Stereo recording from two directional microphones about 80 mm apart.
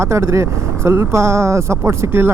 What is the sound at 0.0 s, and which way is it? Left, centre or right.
Speech, right.